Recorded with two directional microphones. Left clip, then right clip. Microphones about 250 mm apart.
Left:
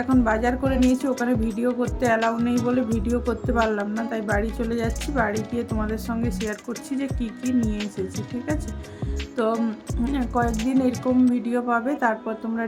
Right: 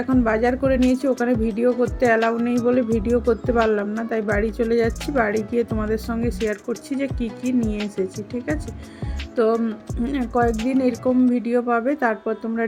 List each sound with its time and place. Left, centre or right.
0.1 s speech: centre
9.4 s speech: centre